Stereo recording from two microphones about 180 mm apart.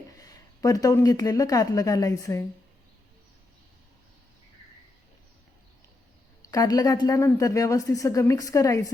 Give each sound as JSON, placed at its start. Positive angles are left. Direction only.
{"t": 0.2, "sound": "speech", "side_deg": 20}
{"t": 6.4, "sound": "a woman's voice", "side_deg": 20}